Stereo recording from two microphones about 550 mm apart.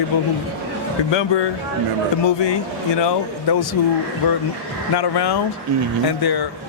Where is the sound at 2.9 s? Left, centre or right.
Left.